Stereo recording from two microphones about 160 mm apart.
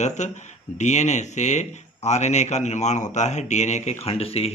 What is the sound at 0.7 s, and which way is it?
A man's voice, 45° left (ahead or behind).